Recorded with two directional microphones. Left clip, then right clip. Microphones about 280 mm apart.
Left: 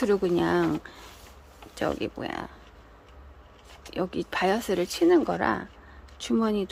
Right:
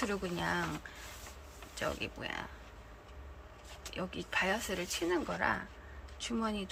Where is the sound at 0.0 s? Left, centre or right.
Left.